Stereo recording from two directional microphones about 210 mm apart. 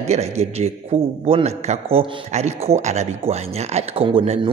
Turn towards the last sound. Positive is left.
turn(degrees=-30)  # may be behind; listen again after turning